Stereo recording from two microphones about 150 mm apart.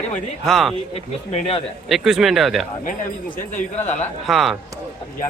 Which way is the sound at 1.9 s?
Centre (ahead or behind).